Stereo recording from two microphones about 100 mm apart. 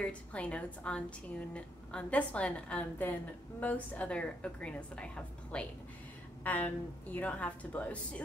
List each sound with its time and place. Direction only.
0.0 s a woman's voice: 10° left (ahead or behind)